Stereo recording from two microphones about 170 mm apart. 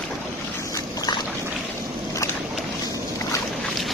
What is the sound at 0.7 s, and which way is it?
Boat, 20° left (ahead or behind).